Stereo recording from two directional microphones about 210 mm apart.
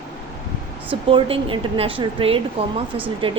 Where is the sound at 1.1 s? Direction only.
25° right (ahead or behind).